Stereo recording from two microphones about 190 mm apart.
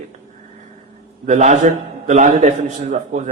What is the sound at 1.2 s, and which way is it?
A man's voice, 40° right (ahead or behind).